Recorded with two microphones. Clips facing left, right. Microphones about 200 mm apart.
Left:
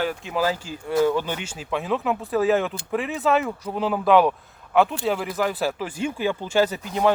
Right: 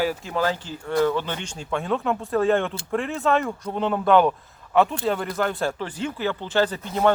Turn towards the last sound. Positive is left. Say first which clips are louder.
# even
turn(degrees=5)  # may be behind; listen again after turning